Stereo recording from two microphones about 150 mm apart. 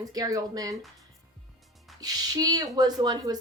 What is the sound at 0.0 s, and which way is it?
Speech, 25° right (ahead or behind).